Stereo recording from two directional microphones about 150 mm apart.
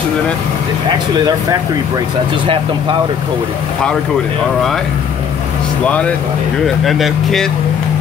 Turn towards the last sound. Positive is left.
turn(degrees=0)  # may be behind; listen again after turning